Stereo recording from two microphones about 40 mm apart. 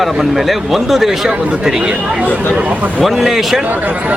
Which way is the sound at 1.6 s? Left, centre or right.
Centre.